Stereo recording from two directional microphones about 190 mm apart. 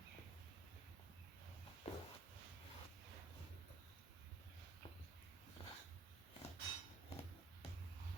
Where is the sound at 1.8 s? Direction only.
30° left (ahead or behind).